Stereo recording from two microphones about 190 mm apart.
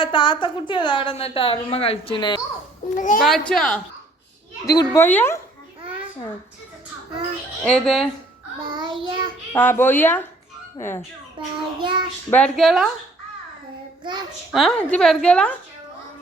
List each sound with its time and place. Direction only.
0.0 s a woman's voice: 25° left (ahead or behind)
2.9 s a child's voice: 45° left (ahead or behind)
3.5 s a woman's voice: centre (ahead or behind)
4.6 s a woman's voice: 20° left (ahead or behind)
7.6 s a woman's voice: 5° left (ahead or behind)
8.6 s child singing: 25° right (ahead or behind)
9.5 s speech: 10° left (ahead or behind)
11.3 s a child's voice: 25° right (ahead or behind)
12.3 s a woman's voice: 5° left (ahead or behind)
14.0 s a child's voice: 25° right (ahead or behind)
14.5 s a woman's voice: centre (ahead or behind)